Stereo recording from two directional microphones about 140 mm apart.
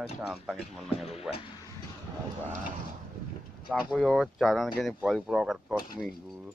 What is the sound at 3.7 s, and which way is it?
Speech, centre (ahead or behind).